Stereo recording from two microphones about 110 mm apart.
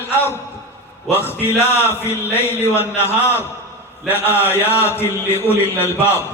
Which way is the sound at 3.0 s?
20° left (ahead or behind).